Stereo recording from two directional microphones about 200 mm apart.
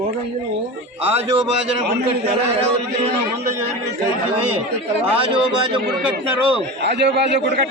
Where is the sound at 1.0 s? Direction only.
30° right (ahead or behind).